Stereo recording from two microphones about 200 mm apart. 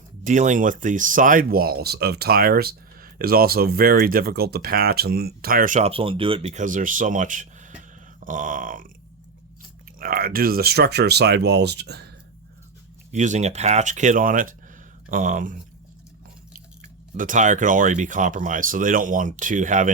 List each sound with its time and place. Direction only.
0.3 s speech: 40° right (ahead or behind)
10.0 s speech: 45° right (ahead or behind)
13.1 s speech: 35° right (ahead or behind)
17.2 s speech: 40° right (ahead or behind)